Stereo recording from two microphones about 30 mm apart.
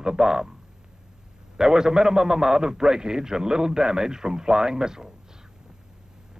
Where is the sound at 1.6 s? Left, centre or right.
Right.